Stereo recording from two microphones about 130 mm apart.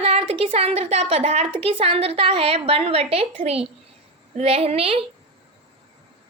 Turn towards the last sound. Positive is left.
turn(degrees=-50)  # may be behind; listen again after turning